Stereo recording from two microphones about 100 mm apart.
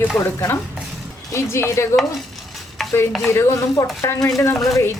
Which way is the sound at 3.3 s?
25° left (ahead or behind).